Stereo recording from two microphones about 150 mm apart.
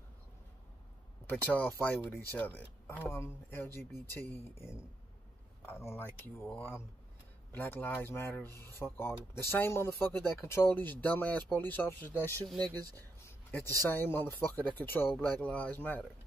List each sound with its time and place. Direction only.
1.4 s speech: 10° left (ahead or behind)
7.5 s speech: 15° left (ahead or behind)
12.9 s a sound: 10° left (ahead or behind)
13.8 s speech: 15° left (ahead or behind)